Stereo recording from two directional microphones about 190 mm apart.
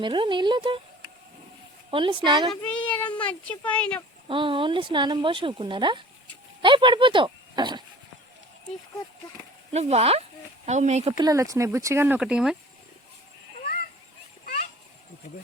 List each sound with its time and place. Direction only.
0.0 s speech: 25° right (ahead or behind)
1.9 s speech: 25° right (ahead or behind)
2.5 s child singing: 5° left (ahead or behind)
3.2 s speech: 5° left (ahead or behind)
4.3 s speech: 25° right (ahead or behind)
9.7 s speech: 35° right (ahead or behind)
11.2 s speech: 20° right (ahead or behind)